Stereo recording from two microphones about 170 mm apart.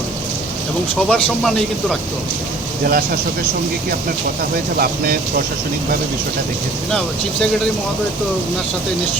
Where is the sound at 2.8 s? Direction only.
65° right (ahead or behind).